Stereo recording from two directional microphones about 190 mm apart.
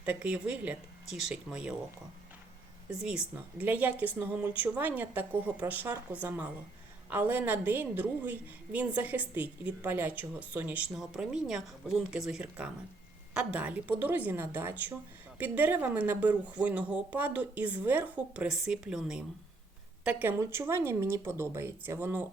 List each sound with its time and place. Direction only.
0.0 s a woman's voice: 10° right (ahead or behind)
3.0 s a woman's voice: 5° right (ahead or behind)